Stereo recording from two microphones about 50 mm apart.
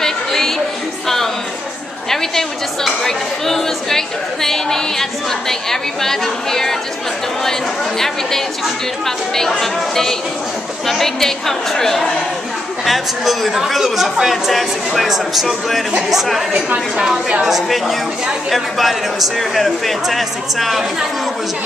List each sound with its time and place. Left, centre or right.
0.0 s a sound: centre
2.0 s speech: centre
9.0 s speech: centre
16.5 s a woman's voice: right
17.0 s a woman's voice: centre